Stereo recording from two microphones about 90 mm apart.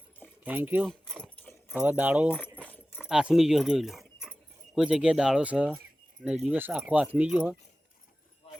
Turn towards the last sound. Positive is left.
turn(degrees=-15)  # may be behind; listen again after turning